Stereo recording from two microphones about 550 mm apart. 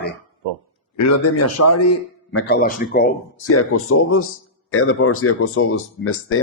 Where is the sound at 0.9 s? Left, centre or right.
Left.